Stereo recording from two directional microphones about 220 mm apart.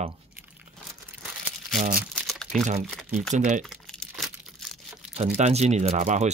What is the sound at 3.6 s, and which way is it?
Crumpling, centre (ahead or behind).